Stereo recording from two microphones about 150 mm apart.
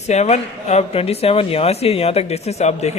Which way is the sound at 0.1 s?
50° left (ahead or behind).